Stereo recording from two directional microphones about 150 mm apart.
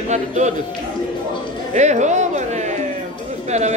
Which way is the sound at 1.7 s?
50° right (ahead or behind).